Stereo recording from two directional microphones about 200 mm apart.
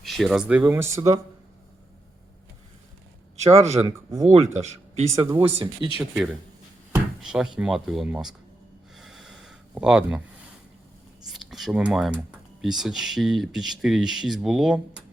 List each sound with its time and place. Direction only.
0.0 s speech: centre (ahead or behind); by 1.2 s 15° right (ahead or behind)
3.5 s speech: 30° right (ahead or behind)
6.9 s speech: 5° right (ahead or behind)
9.0 s a sound: centre (ahead or behind)
11.3 s speech: centre (ahead or behind)